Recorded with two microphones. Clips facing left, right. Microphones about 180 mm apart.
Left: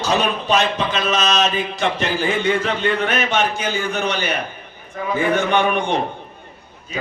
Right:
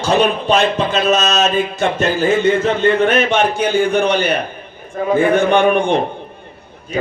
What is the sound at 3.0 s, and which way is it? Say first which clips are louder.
A man's voice: right 6 dB; 50° right (ahead or behind).